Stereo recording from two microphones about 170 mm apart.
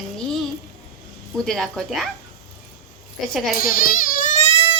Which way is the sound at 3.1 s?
Centre (ahead or behind).